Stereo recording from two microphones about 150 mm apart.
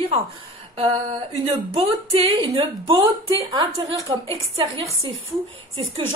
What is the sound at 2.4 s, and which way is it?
Speech, 35° right (ahead or behind).